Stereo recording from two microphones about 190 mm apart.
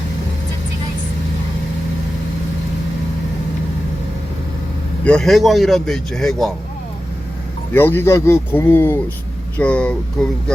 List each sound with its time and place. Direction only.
5.0 s a man's voice: 5° left (ahead or behind)
7.7 s speech: 10° left (ahead or behind)